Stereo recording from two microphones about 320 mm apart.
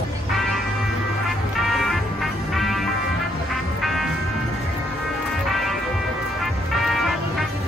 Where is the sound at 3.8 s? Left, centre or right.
Centre.